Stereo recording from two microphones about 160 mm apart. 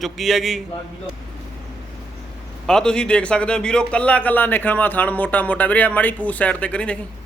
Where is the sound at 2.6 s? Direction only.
5° left (ahead or behind).